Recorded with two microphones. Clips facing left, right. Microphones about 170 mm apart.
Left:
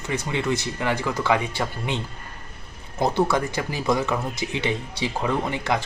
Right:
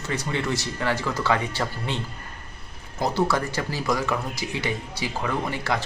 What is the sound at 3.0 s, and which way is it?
Speech, 20° left (ahead or behind).